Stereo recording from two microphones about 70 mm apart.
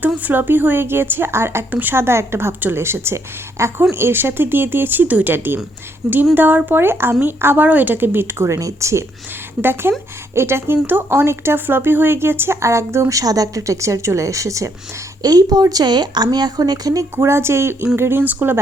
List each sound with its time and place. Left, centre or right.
0.2 s speech: right
8.5 s speech: right
9.6 s speech: right
13.1 s speech: right
15.2 s speech: right
17.2 s speech: right